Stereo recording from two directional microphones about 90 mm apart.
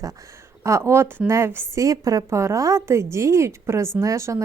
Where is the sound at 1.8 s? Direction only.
40° right (ahead or behind).